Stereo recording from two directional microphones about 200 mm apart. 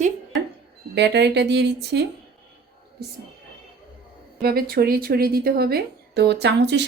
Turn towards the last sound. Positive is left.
turn(degrees=-60)  # may be behind; listen again after turning